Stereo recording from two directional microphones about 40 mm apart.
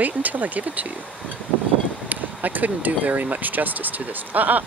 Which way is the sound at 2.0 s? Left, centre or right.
Right.